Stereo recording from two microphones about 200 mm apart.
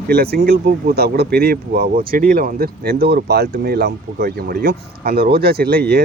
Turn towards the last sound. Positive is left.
turn(degrees=-55)  # may be behind; listen again after turning